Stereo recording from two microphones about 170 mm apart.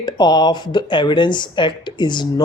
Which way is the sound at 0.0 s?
25° left (ahead or behind).